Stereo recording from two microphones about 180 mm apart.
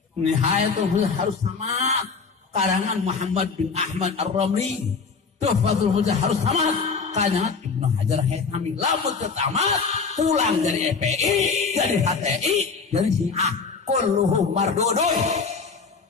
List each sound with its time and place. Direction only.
0.3 s speech: 40° right (ahead or behind)